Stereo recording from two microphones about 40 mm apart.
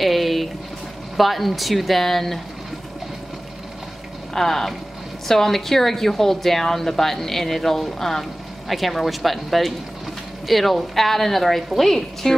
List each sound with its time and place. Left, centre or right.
0.0 s a sound: centre
1.1 s a woman's voice: centre
4.3 s a woman's voice: centre